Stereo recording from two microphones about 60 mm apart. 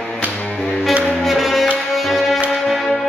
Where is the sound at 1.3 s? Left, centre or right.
Centre.